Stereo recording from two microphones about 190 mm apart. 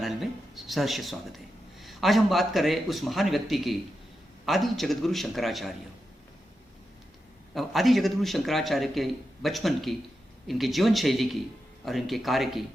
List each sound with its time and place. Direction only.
0.0 s a man's voice: centre (ahead or behind)
7.5 s a man's voice: centre (ahead or behind)